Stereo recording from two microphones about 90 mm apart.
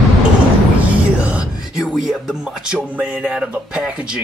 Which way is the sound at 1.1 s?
15° right (ahead or behind).